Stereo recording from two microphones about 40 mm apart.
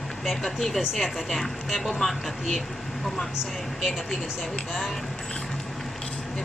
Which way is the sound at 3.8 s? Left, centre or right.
Centre.